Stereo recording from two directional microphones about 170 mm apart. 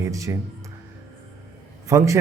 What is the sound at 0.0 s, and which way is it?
Speech, 15° right (ahead or behind).